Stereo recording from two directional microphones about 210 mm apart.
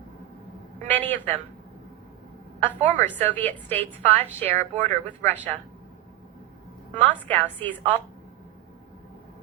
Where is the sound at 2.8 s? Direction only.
35° right (ahead or behind).